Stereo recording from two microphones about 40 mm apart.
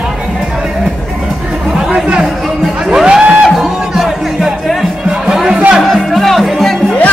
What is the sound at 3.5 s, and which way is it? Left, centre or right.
Music, centre.